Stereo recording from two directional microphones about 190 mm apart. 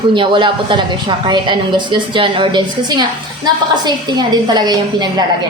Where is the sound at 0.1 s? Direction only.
25° right (ahead or behind).